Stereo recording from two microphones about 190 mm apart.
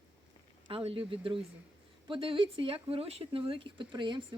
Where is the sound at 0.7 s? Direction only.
30° right (ahead or behind).